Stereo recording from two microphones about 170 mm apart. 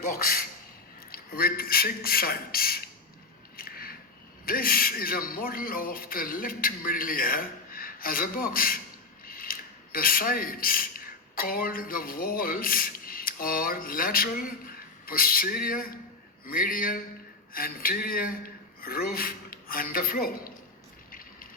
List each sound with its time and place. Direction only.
0.1 s speech: 60° left (ahead or behind)
3.6 s a sound: 60° left (ahead or behind)
4.4 s speech: 60° left (ahead or behind)